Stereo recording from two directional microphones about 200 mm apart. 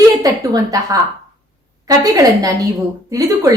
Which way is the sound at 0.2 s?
15° right (ahead or behind).